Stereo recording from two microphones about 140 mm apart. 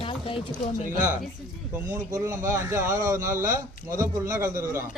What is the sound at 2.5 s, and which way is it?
Speech, 20° right (ahead or behind).